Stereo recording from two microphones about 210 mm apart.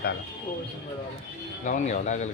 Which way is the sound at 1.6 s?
35° left (ahead or behind).